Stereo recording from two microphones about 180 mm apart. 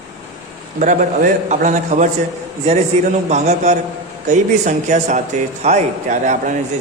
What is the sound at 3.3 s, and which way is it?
A man's voice, 40° right (ahead or behind).